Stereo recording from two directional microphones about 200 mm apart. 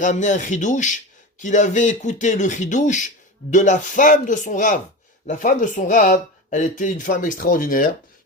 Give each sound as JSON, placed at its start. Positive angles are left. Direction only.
{"t": 0.0, "sound": "speech", "side_deg": 35}